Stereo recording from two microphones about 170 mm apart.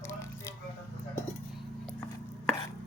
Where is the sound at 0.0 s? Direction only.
15° left (ahead or behind).